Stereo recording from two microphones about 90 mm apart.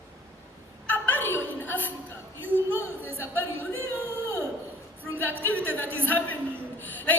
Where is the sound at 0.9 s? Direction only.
20° left (ahead or behind).